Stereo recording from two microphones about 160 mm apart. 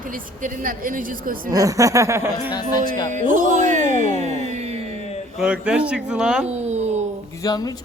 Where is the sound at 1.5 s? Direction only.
20° right (ahead or behind).